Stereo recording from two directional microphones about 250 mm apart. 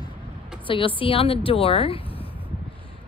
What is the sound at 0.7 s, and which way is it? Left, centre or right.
Speech, left.